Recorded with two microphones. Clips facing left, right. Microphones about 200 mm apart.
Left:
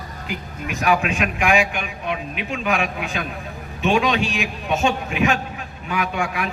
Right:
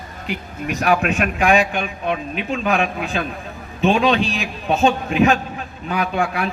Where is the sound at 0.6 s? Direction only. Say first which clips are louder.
Right 2 dB; 40° right (ahead or behind).